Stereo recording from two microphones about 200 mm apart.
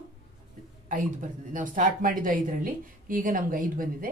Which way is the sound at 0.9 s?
40° right (ahead or behind).